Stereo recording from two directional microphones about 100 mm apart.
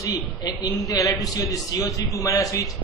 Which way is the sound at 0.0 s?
40° left (ahead or behind).